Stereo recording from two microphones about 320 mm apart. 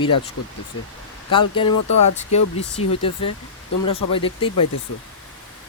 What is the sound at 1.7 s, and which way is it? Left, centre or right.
Speech, left.